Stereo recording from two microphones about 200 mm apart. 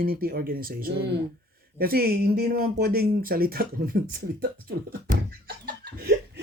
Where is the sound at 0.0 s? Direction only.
50° right (ahead or behind).